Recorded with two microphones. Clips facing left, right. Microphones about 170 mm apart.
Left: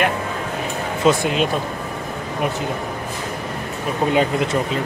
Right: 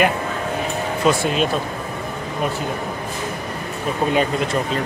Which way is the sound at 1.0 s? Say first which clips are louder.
Left 2 dB; 15° left (ahead or behind).